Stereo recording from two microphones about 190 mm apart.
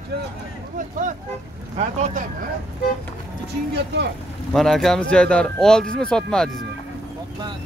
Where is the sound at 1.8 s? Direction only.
35° right (ahead or behind).